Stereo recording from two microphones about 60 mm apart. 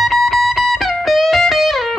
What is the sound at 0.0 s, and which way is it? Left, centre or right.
Music, centre.